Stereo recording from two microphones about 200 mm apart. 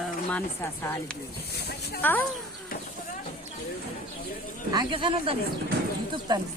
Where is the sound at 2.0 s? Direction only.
10° left (ahead or behind).